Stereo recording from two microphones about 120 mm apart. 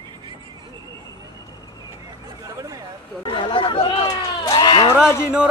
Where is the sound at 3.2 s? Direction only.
45° left (ahead or behind).